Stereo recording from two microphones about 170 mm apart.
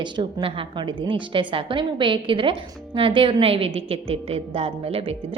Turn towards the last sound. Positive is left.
turn(degrees=-35)  # may be behind; listen again after turning